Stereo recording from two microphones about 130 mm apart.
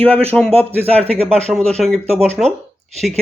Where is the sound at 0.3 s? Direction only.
5° left (ahead or behind).